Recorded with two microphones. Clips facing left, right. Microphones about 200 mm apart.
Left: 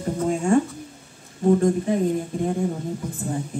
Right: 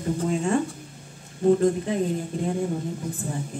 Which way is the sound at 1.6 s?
55° left (ahead or behind).